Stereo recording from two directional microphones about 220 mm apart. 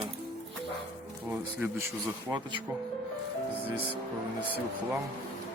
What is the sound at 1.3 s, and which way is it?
Speech, 10° right (ahead or behind).